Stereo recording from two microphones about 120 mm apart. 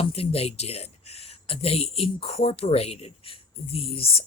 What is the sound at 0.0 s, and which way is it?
Speech, 50° left (ahead or behind).